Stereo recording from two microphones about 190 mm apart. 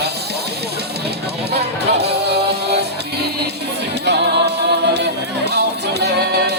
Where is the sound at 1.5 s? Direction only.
60° right (ahead or behind).